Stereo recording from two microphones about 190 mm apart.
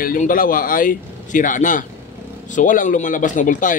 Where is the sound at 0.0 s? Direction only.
45° left (ahead or behind).